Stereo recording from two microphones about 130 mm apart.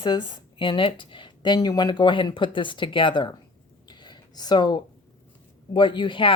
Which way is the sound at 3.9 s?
35° left (ahead or behind).